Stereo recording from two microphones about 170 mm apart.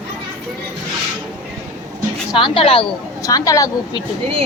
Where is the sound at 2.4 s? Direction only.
35° left (ahead or behind).